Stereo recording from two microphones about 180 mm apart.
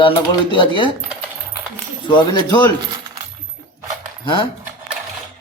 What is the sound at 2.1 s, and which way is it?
Speech, 25° left (ahead or behind).